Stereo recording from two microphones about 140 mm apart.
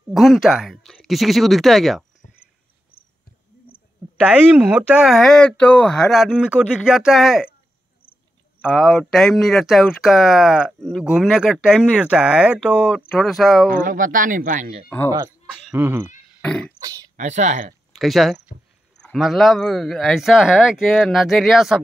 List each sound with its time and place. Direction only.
0.1 s speech: centre (ahead or behind)
4.3 s speech: 10° right (ahead or behind)
8.1 s a sound: 10° left (ahead or behind)
8.7 s speech: centre (ahead or behind)
13.7 s speech: 75° right (ahead or behind)
15.0 s speech: 20° right (ahead or behind)
16.3 s beatboxing: 10° left (ahead or behind)
16.8 s a sound: 25° right (ahead or behind)
17.2 s speech: 60° right (ahead or behind)
17.9 s speech: centre (ahead or behind)